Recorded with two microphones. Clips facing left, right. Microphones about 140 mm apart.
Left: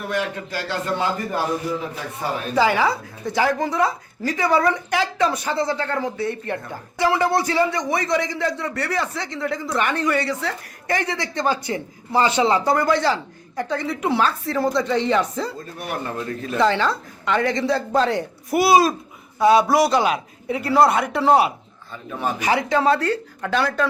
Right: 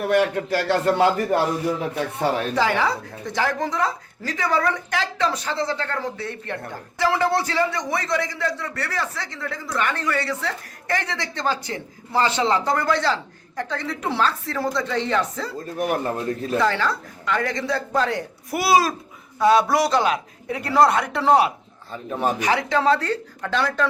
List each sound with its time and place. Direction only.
0.0 s a man's voice: 60° right (ahead or behind)
2.6 s a man's voice: 5° left (ahead or behind)
15.8 s a man's voice: 40° right (ahead or behind)
16.6 s a man's voice: 25° left (ahead or behind); by 21.5 s 10° left (ahead or behind)
22.1 s a man's voice: 35° right (ahead or behind)
22.4 s a man's voice: 10° left (ahead or behind)